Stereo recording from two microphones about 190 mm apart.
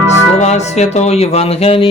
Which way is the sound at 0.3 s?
35° left (ahead or behind).